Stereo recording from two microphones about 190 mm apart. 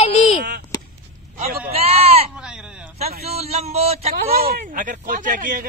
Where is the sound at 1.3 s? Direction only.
35° right (ahead or behind).